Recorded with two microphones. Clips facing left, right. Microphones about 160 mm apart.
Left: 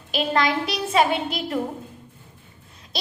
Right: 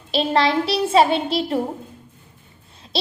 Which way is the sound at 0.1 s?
30° right (ahead or behind).